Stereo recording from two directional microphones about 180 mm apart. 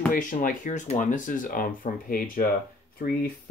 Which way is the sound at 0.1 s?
50° left (ahead or behind).